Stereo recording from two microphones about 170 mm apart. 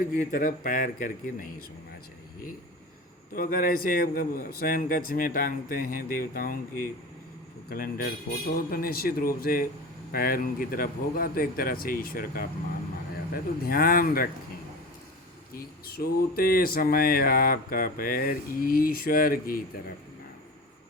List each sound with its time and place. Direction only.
0.2 s speech: 50° left (ahead or behind)
3.3 s speech: 55° left (ahead or behind)
15.5 s speech: 60° left (ahead or behind)